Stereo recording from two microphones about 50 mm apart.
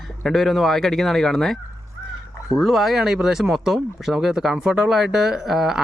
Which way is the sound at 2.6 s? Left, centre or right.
Centre.